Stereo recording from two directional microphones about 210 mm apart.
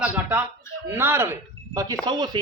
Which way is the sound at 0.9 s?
10° right (ahead or behind).